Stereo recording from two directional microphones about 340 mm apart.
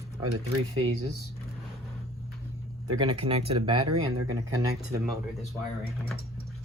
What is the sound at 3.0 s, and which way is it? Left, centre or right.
Speech, centre.